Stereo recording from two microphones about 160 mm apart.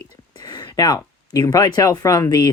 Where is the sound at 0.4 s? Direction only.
25° left (ahead or behind).